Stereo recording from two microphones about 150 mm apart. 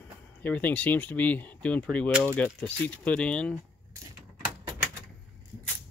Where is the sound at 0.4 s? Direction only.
10° left (ahead or behind).